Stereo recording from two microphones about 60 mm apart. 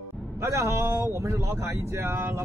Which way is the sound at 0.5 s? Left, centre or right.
Right.